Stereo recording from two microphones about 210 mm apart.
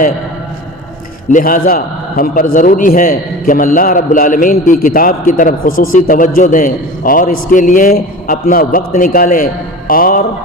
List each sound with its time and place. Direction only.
1.3 s a man's voice: 40° left (ahead or behind)